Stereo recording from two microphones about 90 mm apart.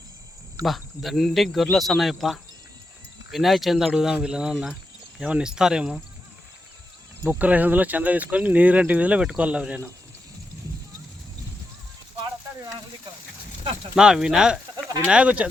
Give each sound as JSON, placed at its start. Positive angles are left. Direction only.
{"t": 0.6, "sound": "speech", "side_deg": 0}
{"t": 4.5, "sound": "speech", "side_deg": 0}
{"t": 5.2, "sound": "speech", "side_deg": -10}
{"t": 7.3, "sound": "speech", "side_deg": -15}
{"t": 13.9, "sound": "speech", "side_deg": -5}